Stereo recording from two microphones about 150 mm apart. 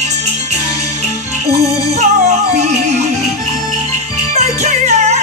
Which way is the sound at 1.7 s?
50° right (ahead or behind).